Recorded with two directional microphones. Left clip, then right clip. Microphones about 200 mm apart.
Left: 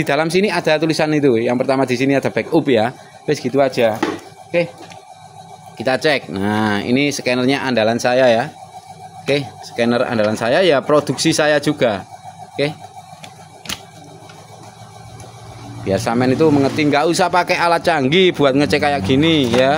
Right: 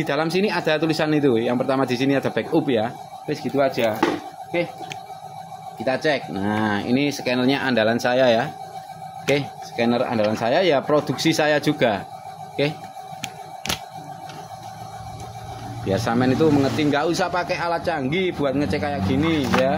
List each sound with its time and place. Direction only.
0.0 s speech: 35° left (ahead or behind)
3.3 s speech: 55° left (ahead or behind)
5.9 s speech: 45° left (ahead or behind); by 12.7 s 20° left (ahead or behind)
15.9 s speech: 25° left (ahead or behind); by 19.7 s 45° left (ahead or behind)